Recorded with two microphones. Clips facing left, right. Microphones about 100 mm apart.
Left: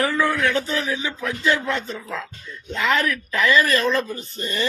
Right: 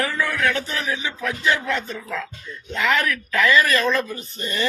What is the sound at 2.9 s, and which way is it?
Speech, 30° left (ahead or behind).